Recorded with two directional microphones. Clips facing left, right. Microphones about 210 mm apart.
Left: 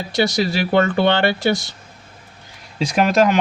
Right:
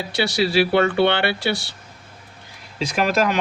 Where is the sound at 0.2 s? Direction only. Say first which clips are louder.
Even; 45° left (ahead or behind).